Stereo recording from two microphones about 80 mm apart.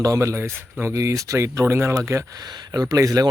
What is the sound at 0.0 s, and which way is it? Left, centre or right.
Speech, right.